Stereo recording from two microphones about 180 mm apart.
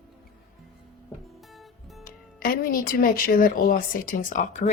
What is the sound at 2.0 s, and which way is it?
Speech, 55° left (ahead or behind).